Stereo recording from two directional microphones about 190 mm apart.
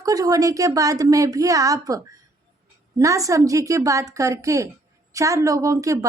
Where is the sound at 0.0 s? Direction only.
20° right (ahead or behind).